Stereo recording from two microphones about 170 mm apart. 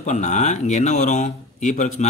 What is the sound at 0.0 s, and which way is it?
Speech, 45° left (ahead or behind).